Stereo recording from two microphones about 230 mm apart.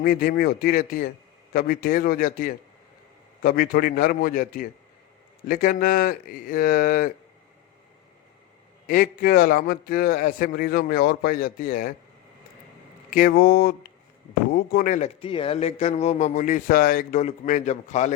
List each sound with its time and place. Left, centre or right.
0.0 s a man's voice: left
8.9 s a man's voice: left
13.1 s a man's voice: left